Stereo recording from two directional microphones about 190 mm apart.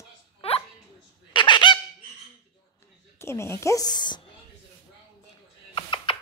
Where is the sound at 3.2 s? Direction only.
15° left (ahead or behind).